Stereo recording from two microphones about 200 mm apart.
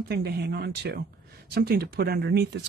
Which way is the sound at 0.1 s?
55° right (ahead or behind).